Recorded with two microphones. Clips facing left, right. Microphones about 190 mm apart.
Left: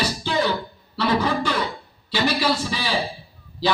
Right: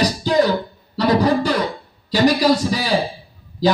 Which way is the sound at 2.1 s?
40° right (ahead or behind).